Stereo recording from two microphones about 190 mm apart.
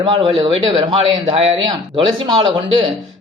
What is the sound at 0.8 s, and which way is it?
A man's voice, 25° right (ahead or behind).